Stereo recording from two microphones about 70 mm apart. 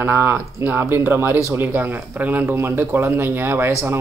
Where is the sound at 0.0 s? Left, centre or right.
Right.